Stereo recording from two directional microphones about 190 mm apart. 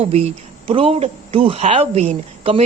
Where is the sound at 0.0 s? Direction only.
30° right (ahead or behind).